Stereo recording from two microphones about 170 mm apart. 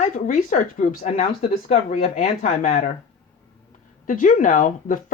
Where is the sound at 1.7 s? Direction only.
40° left (ahead or behind).